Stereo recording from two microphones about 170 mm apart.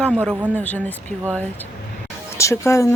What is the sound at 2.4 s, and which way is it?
Speech, 15° left (ahead or behind).